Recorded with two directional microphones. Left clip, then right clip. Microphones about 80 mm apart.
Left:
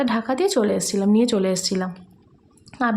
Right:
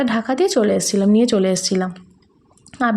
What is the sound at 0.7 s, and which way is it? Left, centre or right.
A woman's voice, right.